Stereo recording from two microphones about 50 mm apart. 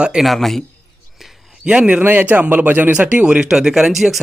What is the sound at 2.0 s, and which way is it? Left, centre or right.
Speech, right.